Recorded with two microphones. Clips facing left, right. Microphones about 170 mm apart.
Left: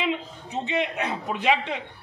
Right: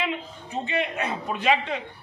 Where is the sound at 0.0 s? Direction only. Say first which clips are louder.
Left 2 dB; 20° left (ahead or behind).